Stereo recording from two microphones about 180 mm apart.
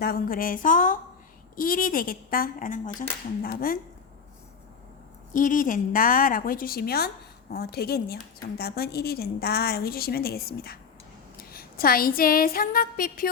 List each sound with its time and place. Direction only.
0.0 s a woman's voice: 55° left (ahead or behind)
5.3 s a woman's voice: 50° left (ahead or behind)